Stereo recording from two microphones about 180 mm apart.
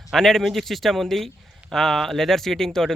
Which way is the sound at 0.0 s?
Centre (ahead or behind).